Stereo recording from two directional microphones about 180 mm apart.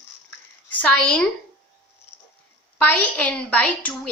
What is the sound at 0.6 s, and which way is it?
Speech, 10° left (ahead or behind).